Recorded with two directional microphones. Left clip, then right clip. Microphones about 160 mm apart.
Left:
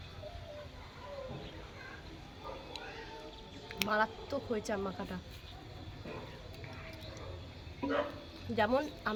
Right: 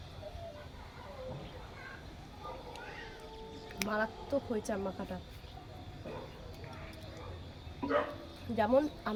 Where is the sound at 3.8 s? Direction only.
15° left (ahead or behind).